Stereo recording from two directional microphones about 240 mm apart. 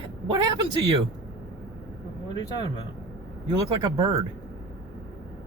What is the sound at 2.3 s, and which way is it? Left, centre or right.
Speech, centre.